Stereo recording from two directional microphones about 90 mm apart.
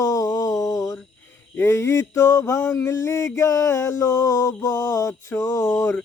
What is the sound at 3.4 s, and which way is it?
Speech, 35° left (ahead or behind).